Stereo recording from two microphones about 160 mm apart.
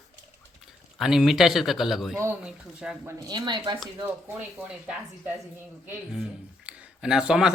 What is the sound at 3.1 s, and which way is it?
Speech, 25° right (ahead or behind).